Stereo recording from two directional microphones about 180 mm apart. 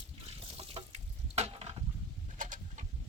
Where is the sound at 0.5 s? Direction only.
35° right (ahead or behind).